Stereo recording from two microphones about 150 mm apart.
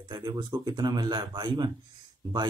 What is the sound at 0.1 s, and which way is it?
A man's voice, 30° right (ahead or behind).